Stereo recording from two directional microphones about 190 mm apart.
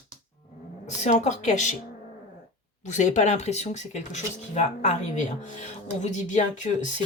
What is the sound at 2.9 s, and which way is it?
Speech, 40° left (ahead or behind).